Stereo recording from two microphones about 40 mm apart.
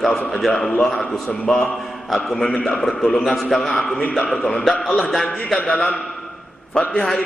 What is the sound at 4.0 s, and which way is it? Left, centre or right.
Speech, left.